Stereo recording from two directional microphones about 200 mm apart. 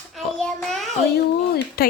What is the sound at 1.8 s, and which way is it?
Speech, 50° left (ahead or behind).